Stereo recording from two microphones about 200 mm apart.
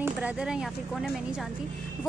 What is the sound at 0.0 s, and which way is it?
A woman's voice, 5° right (ahead or behind).